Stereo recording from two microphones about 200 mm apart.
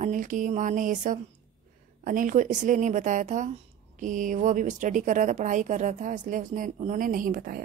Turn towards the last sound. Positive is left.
turn(degrees=-45)  # may be behind; listen again after turning